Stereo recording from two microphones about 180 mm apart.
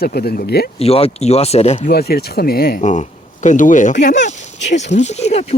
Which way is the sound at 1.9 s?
60° left (ahead or behind).